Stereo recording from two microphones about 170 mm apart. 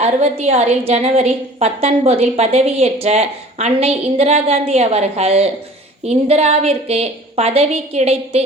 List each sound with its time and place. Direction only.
0.0 s a woman's voice: 40° right (ahead or behind)